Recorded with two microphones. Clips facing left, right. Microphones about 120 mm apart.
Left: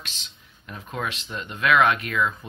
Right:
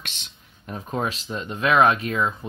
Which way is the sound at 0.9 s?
35° right (ahead or behind).